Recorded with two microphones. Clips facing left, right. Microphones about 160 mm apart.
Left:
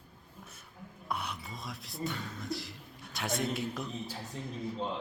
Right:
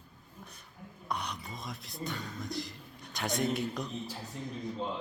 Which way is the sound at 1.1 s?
5° left (ahead or behind).